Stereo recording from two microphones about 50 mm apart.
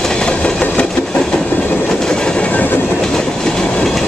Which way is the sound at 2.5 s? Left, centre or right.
Left.